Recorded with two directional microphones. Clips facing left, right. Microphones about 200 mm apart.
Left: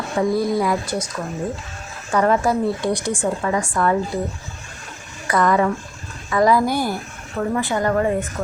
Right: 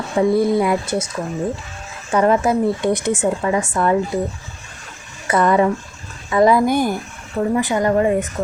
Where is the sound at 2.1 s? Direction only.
20° right (ahead or behind).